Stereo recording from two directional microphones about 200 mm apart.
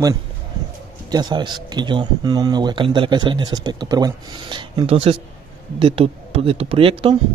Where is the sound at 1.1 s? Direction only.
20° right (ahead or behind).